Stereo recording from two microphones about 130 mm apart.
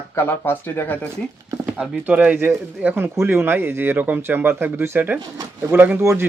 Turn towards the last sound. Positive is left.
turn(degrees=-20)  # may be behind; listen again after turning